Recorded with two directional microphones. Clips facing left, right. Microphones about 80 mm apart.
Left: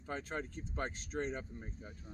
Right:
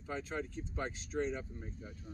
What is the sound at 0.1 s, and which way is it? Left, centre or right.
Speech, left.